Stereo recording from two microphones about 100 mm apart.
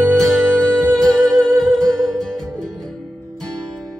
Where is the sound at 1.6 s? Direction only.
5° left (ahead or behind).